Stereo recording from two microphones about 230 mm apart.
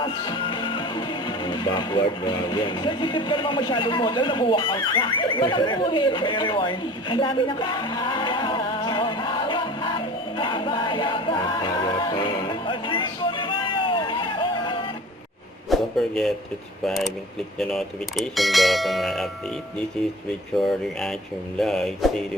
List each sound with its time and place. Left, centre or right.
0.0 s speech: left
15.7 s a sound: centre
16.8 s speech: centre
20.6 s speech: centre